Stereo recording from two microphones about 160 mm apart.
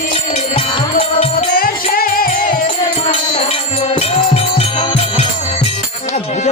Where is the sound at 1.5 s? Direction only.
65° left (ahead or behind).